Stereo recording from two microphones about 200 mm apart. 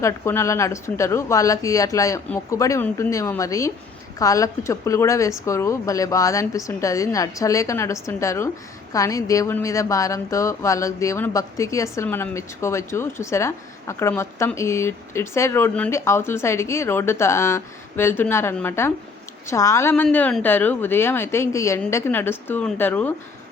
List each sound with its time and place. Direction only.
0.0 s speech: 15° left (ahead or behind)